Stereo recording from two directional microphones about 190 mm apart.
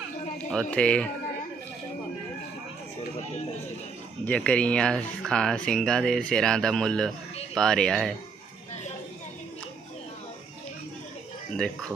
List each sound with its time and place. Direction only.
0.3 s speech: 5° left (ahead or behind)
4.3 s speech: 5° left (ahead or behind)
11.5 s speech: 5° left (ahead or behind)